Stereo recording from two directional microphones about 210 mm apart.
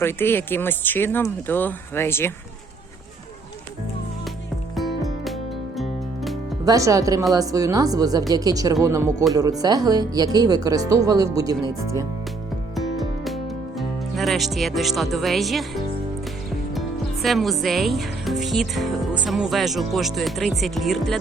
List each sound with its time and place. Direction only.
0.0 s speech: 10° left (ahead or behind)
4.8 s music: centre (ahead or behind)
6.7 s speech: 15° right (ahead or behind)
12.7 s music: centre (ahead or behind)
13.7 s speech: centre (ahead or behind)
17.2 s speech: centre (ahead or behind)